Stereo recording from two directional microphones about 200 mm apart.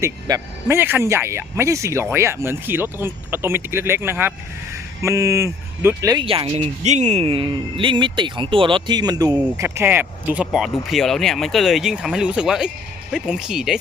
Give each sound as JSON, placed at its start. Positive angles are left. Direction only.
{"t": 0.0, "sound": "speech", "side_deg": -15}